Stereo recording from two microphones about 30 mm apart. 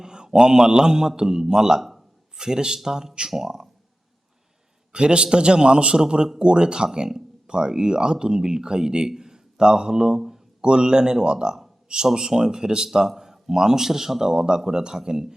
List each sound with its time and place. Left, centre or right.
0.0 s a man's voice: right
4.9 s a man's voice: right